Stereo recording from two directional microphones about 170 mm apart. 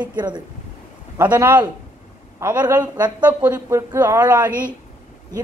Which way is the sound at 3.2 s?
10° right (ahead or behind).